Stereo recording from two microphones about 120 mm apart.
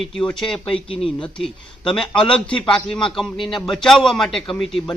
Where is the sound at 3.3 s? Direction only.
40° left (ahead or behind).